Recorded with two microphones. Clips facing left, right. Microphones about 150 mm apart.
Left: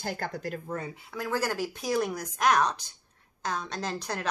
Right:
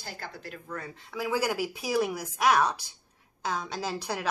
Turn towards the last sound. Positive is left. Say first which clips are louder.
# right 1 dB
turn(degrees=-10)  # may be behind; listen again after turning